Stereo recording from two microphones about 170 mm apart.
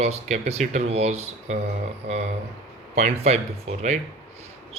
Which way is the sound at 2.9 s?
40° right (ahead or behind).